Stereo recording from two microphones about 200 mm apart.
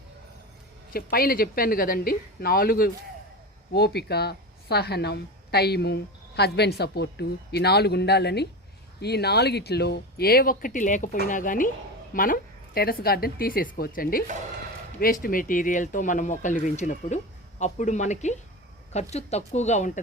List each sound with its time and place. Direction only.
0.9 s a woman's voice: 50° left (ahead or behind)